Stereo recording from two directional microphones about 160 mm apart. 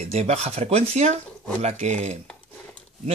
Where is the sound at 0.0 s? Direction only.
40° right (ahead or behind).